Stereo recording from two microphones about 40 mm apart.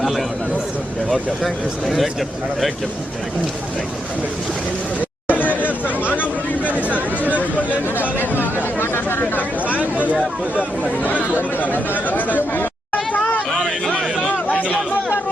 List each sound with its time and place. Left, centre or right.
0.0 s a man's voice: centre
5.3 s chatter: left
5.6 s chatter: right
7.2 s chatter: left
7.9 s chatter: left
8.8 s chatter: left
9.7 s a sound: right
11.0 s chatter: left
11.6 s chatter: left
13.1 s hubbub: left